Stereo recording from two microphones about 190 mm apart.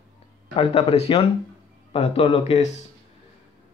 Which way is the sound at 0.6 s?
30° left (ahead or behind).